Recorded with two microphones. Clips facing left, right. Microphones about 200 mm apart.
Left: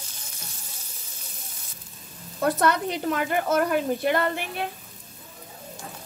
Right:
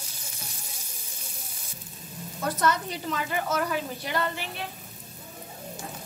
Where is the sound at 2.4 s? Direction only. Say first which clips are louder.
Left 4 dB; 60° left (ahead or behind).